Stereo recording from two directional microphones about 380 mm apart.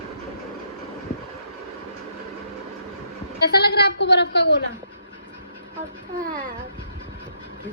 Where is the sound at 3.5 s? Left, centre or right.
Left.